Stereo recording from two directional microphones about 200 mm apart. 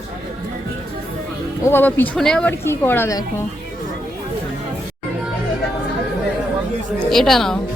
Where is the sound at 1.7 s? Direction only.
10° left (ahead or behind).